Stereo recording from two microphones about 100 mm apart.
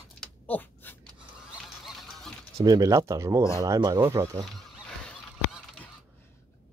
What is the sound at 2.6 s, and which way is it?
Speech, 40° right (ahead or behind).